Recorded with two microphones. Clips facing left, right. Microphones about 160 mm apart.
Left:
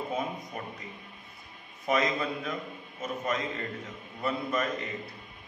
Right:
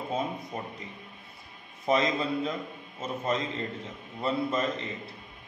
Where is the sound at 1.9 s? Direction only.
30° right (ahead or behind).